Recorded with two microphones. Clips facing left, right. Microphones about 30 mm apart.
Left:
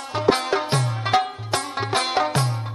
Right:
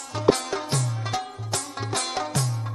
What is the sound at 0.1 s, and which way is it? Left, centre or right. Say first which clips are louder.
Music: left 2 dB; left.